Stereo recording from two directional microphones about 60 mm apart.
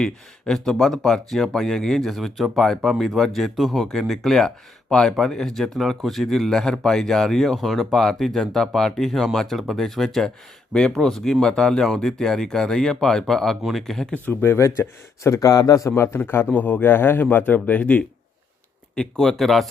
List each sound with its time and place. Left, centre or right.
0.0 s speech: centre
14.4 s speech: left
15.4 s a man's voice: left
15.9 s a man's voice: left
16.5 s a man's voice: left
18.9 s speech: centre